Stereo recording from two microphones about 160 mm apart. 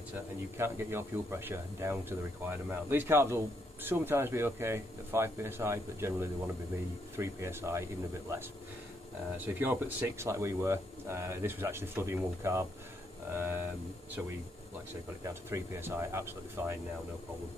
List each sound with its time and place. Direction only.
0.6 s speech: 15° right (ahead or behind)
15.2 s speech: 15° right (ahead or behind)